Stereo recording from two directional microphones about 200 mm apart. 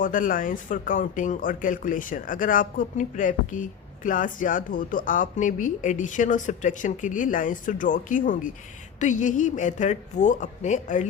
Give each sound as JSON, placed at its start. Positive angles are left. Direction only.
{"t": 0.0, "sound": "speech", "side_deg": 40}